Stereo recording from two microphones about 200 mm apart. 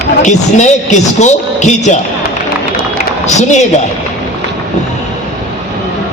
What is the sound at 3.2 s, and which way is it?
Speech, 35° left (ahead or behind).